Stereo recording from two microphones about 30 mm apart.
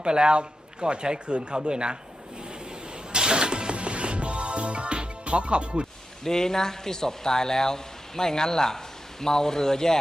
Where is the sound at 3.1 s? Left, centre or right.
Right.